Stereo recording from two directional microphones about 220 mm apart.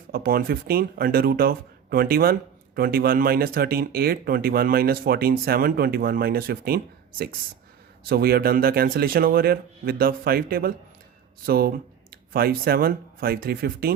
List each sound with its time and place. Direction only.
0.1 s speech: 40° right (ahead or behind)